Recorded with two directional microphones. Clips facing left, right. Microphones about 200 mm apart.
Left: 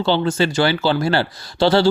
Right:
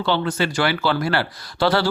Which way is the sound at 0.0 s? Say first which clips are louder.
Left 4 dB; 25° left (ahead or behind).